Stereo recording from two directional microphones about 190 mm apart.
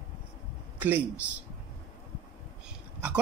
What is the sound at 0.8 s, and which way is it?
Speech, 10° right (ahead or behind).